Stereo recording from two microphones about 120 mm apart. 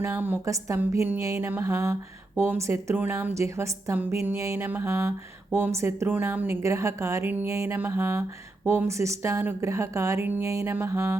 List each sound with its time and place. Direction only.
0.0 s speech: 15° right (ahead or behind)